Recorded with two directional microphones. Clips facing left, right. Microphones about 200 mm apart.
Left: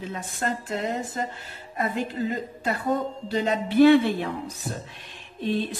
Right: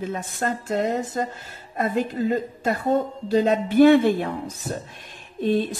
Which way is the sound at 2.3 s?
45° right (ahead or behind).